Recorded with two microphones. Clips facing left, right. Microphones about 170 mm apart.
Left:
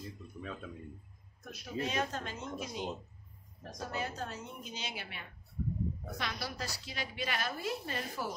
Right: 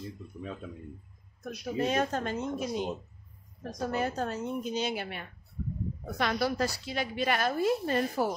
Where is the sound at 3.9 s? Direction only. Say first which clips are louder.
Right 8 dB; 50° right (ahead or behind).